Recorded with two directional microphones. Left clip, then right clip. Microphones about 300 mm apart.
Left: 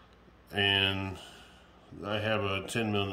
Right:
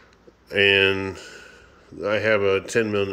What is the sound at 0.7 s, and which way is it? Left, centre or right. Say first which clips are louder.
Speech: right 10 dB; centre.